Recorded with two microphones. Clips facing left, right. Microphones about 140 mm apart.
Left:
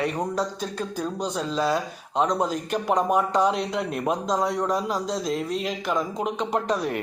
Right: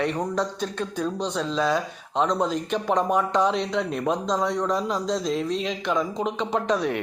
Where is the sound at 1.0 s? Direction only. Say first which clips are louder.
Right 2 dB; 5° left (ahead or behind).